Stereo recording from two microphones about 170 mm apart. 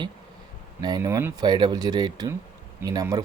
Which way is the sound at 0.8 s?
20° right (ahead or behind).